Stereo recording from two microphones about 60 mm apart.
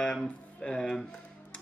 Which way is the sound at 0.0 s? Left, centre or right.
Centre.